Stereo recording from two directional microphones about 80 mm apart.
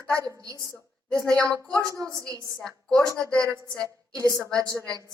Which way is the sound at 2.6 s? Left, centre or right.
Centre.